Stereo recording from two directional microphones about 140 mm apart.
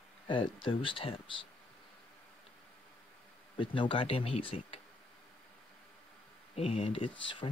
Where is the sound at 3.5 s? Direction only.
35° left (ahead or behind).